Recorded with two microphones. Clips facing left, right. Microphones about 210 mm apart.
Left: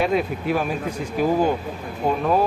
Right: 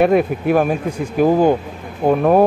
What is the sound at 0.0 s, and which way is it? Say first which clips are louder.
Speech: right 7 dB; 55° right (ahead or behind).